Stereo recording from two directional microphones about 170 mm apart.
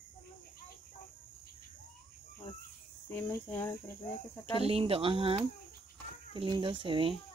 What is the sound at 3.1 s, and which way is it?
Cricket, 15° left (ahead or behind).